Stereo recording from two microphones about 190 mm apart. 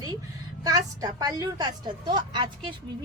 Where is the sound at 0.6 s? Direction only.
20° right (ahead or behind).